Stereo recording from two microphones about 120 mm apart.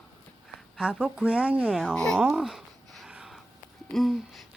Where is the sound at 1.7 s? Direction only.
5° left (ahead or behind).